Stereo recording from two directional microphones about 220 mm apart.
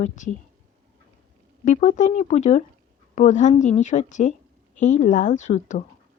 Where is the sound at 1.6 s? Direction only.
35° left (ahead or behind).